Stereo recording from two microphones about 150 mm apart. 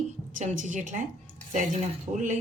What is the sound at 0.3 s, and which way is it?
A woman's voice, 55° right (ahead or behind).